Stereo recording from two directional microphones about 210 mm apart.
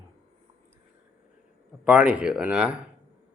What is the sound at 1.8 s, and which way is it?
Speech, 5° right (ahead or behind).